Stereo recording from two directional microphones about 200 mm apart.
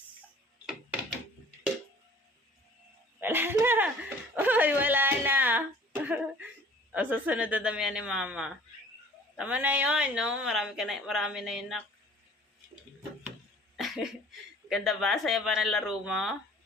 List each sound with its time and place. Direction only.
3.2 s speech: 10° right (ahead or behind)
13.7 s cough: centre (ahead or behind)
14.7 s speech: centre (ahead or behind)